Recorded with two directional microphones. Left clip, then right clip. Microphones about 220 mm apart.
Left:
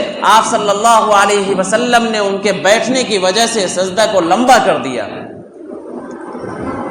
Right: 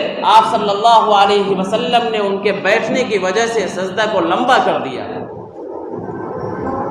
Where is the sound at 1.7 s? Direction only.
55° left (ahead or behind).